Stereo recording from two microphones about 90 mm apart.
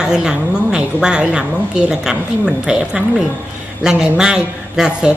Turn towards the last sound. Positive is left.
turn(degrees=-10)  # may be behind; listen again after turning